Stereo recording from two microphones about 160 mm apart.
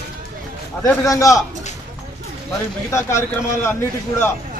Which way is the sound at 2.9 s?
15° left (ahead or behind).